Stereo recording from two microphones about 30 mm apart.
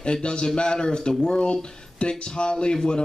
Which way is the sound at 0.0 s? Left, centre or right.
Left.